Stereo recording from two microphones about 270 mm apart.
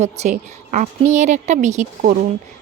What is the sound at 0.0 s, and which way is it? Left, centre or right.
A woman's voice, right.